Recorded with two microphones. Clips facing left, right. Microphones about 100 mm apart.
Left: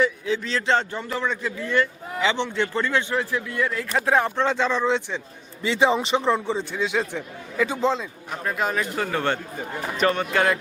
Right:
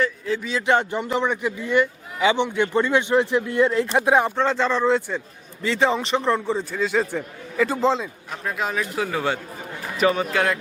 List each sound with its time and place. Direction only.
0.4 s speech: 10° right (ahead or behind)
4.4 s a man's voice: centre (ahead or behind)